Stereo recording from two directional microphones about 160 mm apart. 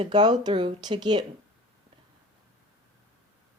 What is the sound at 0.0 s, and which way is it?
Speech, 25° right (ahead or behind).